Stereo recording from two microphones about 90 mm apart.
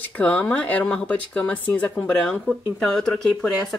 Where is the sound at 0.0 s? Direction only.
20° left (ahead or behind).